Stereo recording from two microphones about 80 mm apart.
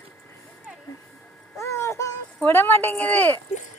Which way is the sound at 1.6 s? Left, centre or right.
Left.